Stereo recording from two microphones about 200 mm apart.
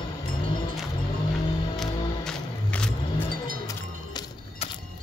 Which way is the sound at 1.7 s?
Centre (ahead or behind).